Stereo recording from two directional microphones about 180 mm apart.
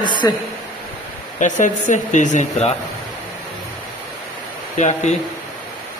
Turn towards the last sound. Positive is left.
turn(degrees=40)  # may be behind; listen again after turning